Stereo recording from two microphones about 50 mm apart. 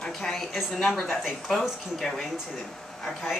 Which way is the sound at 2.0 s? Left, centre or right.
Centre.